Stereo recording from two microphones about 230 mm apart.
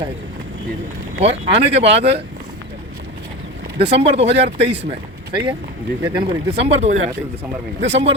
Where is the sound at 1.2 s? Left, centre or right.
Right.